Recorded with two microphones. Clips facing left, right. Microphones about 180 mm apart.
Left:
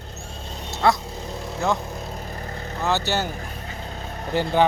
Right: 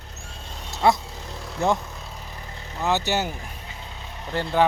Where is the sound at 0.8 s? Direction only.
20° right (ahead or behind).